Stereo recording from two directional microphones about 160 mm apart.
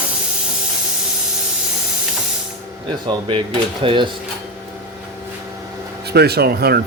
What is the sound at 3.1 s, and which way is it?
Speech, 30° right (ahead or behind).